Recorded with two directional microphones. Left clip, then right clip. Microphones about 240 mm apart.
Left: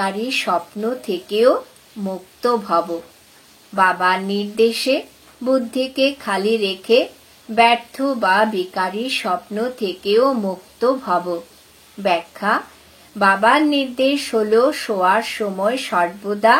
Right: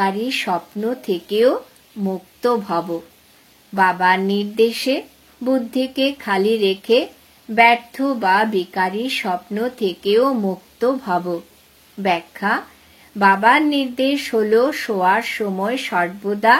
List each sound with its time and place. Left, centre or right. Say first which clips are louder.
0.0 s speech: right 1 dB; right